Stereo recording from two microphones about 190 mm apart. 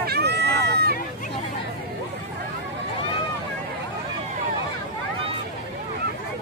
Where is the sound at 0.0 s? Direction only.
60° right (ahead or behind).